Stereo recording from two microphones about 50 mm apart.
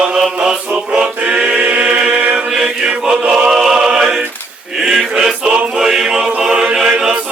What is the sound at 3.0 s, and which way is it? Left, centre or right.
Choir, centre.